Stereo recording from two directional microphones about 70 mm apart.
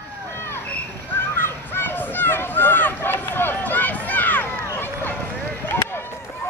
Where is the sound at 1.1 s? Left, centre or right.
Left.